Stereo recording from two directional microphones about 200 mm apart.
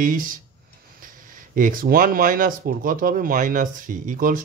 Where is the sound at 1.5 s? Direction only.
45° right (ahead or behind).